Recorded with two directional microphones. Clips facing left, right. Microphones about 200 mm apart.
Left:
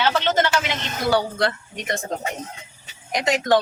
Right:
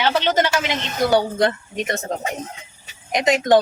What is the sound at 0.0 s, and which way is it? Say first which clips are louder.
Speech: right 2 dB; 15° right (ahead or behind).